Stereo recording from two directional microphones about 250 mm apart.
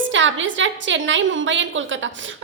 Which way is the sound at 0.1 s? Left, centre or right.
Right.